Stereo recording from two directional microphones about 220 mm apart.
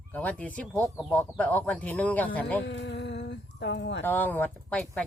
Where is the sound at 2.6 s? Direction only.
50° left (ahead or behind).